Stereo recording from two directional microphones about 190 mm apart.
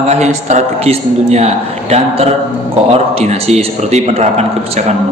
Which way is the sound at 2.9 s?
35° right (ahead or behind).